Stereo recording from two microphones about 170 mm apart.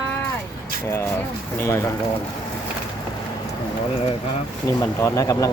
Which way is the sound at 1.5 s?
15° left (ahead or behind).